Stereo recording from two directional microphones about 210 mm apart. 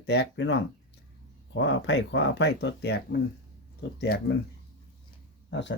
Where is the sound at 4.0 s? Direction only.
55° left (ahead or behind).